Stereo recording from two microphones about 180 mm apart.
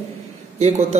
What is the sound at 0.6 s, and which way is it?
Speech, 35° right (ahead or behind).